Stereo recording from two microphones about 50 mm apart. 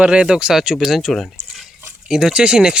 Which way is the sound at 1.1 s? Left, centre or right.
Centre.